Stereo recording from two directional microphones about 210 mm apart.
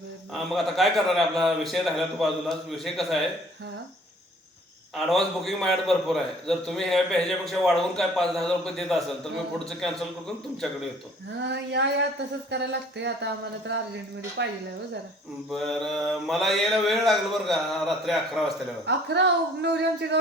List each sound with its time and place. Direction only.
0.3 s a man's voice: centre (ahead or behind)
4.9 s a man's voice: centre (ahead or behind)
11.4 s a sound: 55° right (ahead or behind)
12.5 s speech: 55° right (ahead or behind)
14.4 s a sound: 55° right (ahead or behind)
15.4 s a man's voice: centre (ahead or behind)
18.9 s speech: 55° right (ahead or behind)